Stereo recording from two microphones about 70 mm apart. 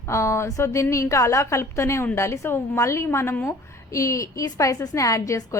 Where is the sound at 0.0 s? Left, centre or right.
Left.